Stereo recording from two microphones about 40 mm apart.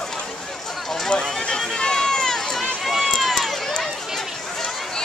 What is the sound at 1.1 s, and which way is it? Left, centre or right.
Run, left.